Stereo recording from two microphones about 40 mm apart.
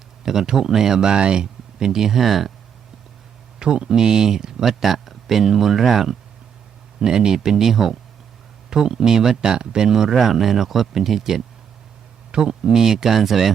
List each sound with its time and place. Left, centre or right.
0.2 s speech: centre
3.6 s speech: centre
7.0 s speech: centre